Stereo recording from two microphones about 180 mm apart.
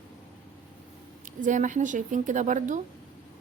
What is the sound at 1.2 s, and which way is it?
A woman's voice, 45° right (ahead or behind).